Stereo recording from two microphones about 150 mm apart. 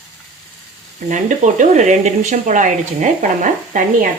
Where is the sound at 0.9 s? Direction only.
60° right (ahead or behind).